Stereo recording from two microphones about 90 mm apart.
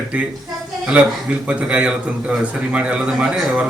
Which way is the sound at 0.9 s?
15° right (ahead or behind).